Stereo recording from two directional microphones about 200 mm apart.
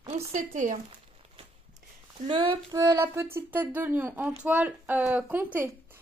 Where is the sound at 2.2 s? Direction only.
25° right (ahead or behind).